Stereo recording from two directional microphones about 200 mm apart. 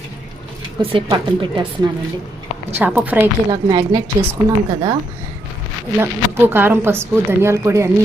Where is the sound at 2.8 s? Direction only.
10° right (ahead or behind).